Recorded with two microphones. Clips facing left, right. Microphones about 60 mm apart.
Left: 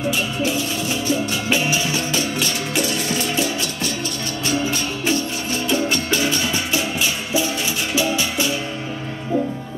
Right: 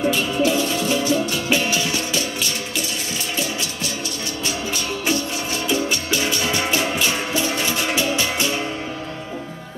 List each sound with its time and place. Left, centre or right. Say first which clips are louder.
0.5 s music: right 3 dB; centre
1.1 s music: right 1 dB; centre
6.5 s music: right 1 dB; right